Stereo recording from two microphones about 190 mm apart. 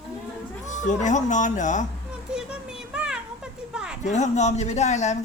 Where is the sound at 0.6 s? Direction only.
40° left (ahead or behind).